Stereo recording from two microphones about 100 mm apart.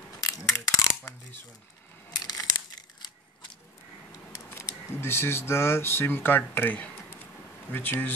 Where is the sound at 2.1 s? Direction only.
40° left (ahead or behind).